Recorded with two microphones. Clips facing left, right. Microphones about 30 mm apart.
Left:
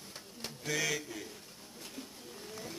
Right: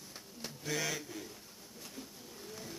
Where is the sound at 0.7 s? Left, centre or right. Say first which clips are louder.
Left 3 dB; centre.